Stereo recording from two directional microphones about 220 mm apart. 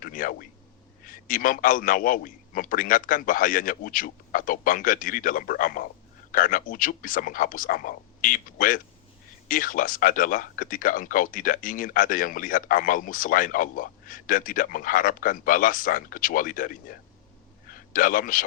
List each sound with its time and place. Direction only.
0.0 s a man's voice: 40° left (ahead or behind)